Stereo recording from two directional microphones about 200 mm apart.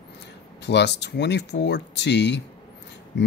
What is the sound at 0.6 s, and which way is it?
Speech, 60° left (ahead or behind).